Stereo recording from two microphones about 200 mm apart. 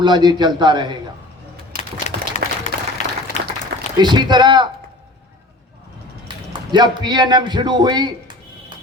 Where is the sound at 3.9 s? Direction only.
20° right (ahead or behind).